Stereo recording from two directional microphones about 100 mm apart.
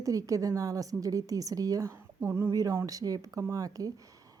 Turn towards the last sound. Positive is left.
turn(degrees=-35)  # may be behind; listen again after turning